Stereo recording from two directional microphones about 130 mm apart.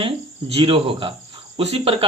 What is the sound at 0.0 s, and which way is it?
A man's voice, 45° right (ahead or behind).